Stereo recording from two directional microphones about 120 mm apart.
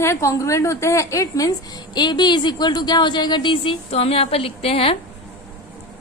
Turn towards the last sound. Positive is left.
turn(degrees=55)  # may be behind; listen again after turning